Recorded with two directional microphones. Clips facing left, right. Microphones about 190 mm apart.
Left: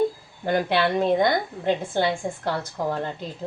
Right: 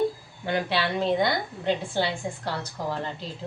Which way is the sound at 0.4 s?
50° left (ahead or behind).